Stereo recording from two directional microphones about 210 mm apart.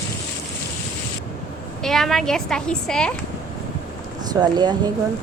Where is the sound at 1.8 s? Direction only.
Centre (ahead or behind).